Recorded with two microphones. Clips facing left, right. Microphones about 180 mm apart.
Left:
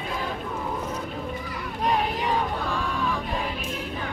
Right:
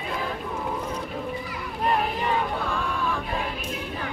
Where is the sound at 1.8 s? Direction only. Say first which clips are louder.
Even; centre (ahead or behind).